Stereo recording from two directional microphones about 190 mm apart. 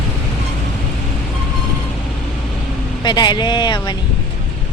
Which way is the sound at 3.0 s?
25° left (ahead or behind).